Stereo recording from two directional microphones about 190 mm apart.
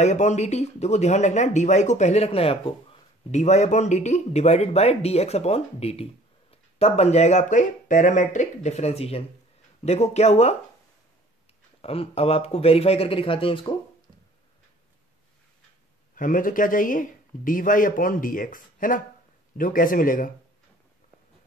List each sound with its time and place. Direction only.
0.0 s speech: 40° left (ahead or behind)
11.8 s speech: 30° left (ahead or behind)
16.2 s speech: 45° left (ahead or behind)